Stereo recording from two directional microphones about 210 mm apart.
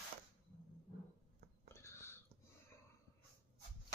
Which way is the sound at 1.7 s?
10° left (ahead or behind).